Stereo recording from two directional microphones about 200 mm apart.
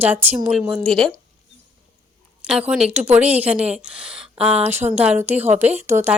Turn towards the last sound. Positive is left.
turn(degrees=-10)  # may be behind; listen again after turning